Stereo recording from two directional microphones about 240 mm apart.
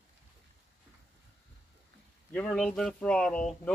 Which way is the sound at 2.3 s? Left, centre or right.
Centre.